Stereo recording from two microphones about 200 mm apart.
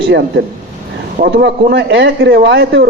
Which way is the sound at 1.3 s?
60° right (ahead or behind).